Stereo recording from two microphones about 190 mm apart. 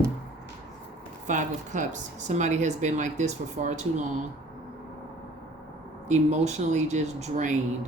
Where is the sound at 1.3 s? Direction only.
40° right (ahead or behind).